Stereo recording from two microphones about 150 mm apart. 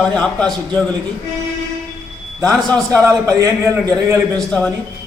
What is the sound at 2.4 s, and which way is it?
Speech, 10° left (ahead or behind).